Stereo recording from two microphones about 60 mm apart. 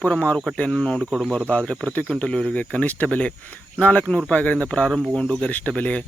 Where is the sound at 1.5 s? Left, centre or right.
Left.